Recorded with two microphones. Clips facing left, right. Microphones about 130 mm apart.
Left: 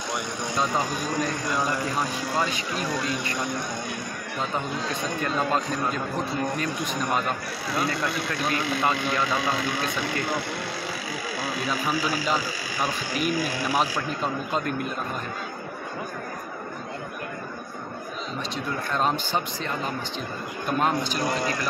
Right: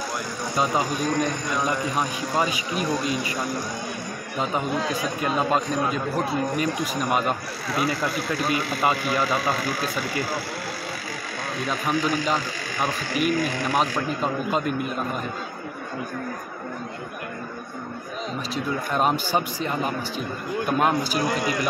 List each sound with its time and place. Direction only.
0.6 s speech: centre (ahead or behind)
2.0 s speech: 20° right (ahead or behind)
2.8 s speech: centre (ahead or behind)
5.2 s a man's voice: 10° right (ahead or behind)
11.5 s speech: 5° left (ahead or behind)
18.5 s a man's voice: 10° right (ahead or behind)
21.3 s a man's voice: 30° left (ahead or behind)